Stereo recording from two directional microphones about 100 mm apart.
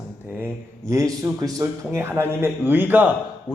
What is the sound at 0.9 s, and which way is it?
A man's voice, 30° right (ahead or behind).